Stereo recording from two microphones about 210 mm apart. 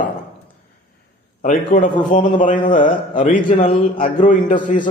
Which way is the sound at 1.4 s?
40° left (ahead or behind).